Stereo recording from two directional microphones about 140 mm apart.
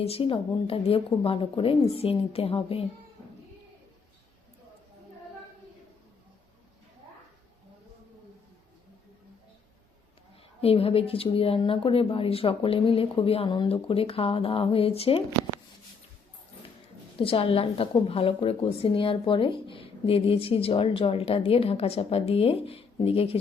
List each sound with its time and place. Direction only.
0.0 s a woman's voice: 45° left (ahead or behind)
10.6 s a woman's voice: 45° left (ahead or behind)
17.2 s a woman's voice: 40° left (ahead or behind)